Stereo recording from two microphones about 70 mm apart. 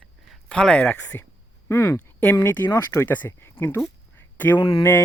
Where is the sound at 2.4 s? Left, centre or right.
Left.